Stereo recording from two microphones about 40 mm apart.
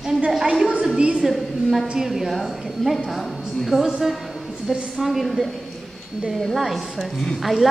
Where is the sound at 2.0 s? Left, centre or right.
Centre.